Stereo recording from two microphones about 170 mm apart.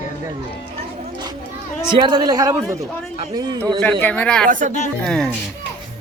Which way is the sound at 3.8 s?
10° left (ahead or behind).